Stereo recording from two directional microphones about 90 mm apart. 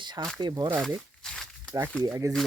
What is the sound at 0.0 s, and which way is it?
Speech, 55° right (ahead or behind).